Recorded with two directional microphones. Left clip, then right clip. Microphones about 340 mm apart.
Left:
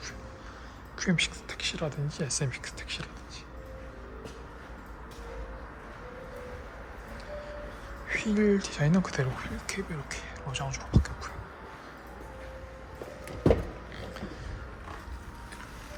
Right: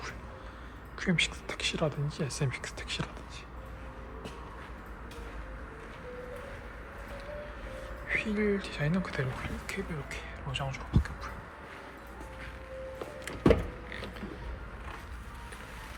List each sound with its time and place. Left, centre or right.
0.9 s speech: centre
8.0 s speech: centre